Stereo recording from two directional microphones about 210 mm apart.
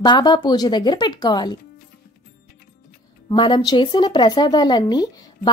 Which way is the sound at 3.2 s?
20° left (ahead or behind).